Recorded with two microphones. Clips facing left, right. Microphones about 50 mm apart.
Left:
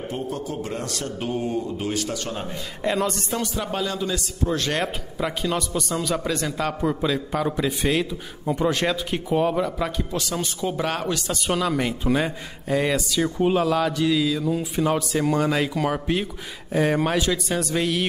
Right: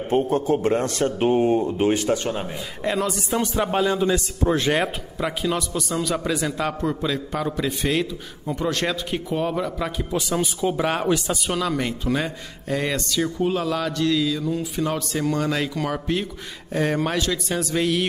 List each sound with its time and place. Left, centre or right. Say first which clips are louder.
0.1 s a man's voice: right 12 dB; right
2.8 s a man's voice: even; centre
3.3 s a man's voice: right 8 dB; right; by 6.7 s centre
6.8 s a man's voice: left 1 dB; centre
11.4 s a man's voice: left 1 dB; centre